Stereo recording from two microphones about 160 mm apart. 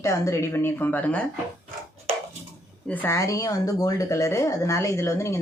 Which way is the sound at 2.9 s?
15° left (ahead or behind).